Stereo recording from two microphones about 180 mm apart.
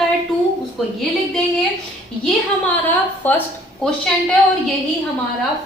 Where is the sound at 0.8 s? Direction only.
Centre (ahead or behind).